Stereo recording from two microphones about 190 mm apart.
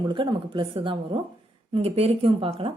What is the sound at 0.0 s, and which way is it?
A woman's voice, 25° right (ahead or behind).